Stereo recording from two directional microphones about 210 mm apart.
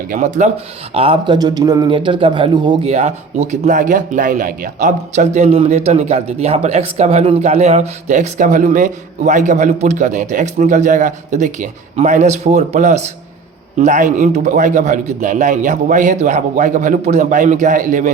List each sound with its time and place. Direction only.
0.1 s a man's voice: 35° right (ahead or behind)
0.9 s a man's voice: 25° right (ahead or behind)